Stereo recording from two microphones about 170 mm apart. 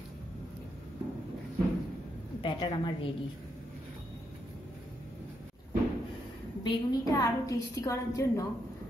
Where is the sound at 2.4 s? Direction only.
30° left (ahead or behind).